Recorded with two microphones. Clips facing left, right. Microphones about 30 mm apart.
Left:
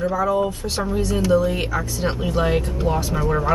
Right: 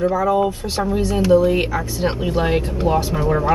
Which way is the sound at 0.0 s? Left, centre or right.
Centre.